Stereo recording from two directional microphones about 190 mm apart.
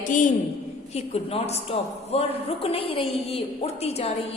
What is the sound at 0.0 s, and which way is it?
A woman's voice, 40° left (ahead or behind).